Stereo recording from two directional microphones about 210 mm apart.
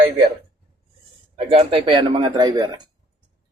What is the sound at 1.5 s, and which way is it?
Speech, 25° right (ahead or behind).